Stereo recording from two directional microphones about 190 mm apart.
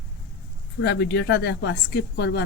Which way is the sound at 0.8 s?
65° left (ahead or behind).